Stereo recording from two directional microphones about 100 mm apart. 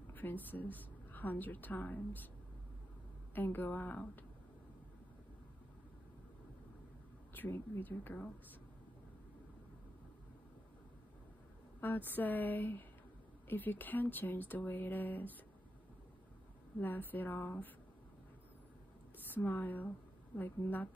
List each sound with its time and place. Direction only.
0.1 s a woman's voice: 20° left (ahead or behind)
3.3 s speech: 20° left (ahead or behind)
7.3 s speech: 20° left (ahead or behind)
11.8 s speech: 20° left (ahead or behind)
16.8 s speech: 20° left (ahead or behind)
19.1 s speech: 20° left (ahead or behind)